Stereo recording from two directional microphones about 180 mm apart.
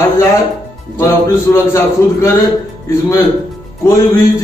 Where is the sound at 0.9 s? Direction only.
15° left (ahead or behind).